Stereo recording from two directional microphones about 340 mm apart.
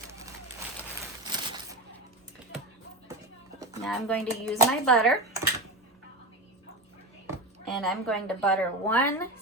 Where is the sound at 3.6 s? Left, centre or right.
Centre.